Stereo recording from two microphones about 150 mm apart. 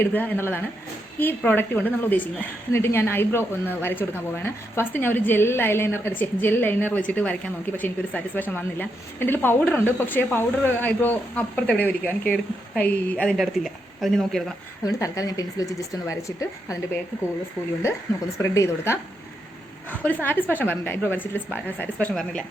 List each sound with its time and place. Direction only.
0.0 s a woman's voice: 10° left (ahead or behind)
14.8 s speech: 20° left (ahead or behind)
18.4 s a woman's voice: 20° left (ahead or behind)
20.2 s a woman's voice: 10° left (ahead or behind)